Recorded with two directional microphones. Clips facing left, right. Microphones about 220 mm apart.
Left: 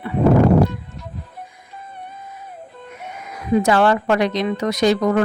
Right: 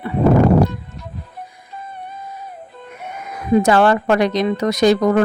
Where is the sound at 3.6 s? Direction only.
45° right (ahead or behind).